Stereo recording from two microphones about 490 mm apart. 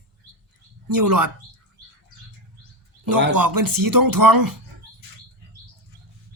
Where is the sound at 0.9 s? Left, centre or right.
Right.